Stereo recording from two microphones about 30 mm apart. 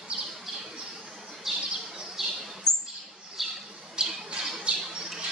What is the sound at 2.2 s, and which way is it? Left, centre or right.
Bird, centre.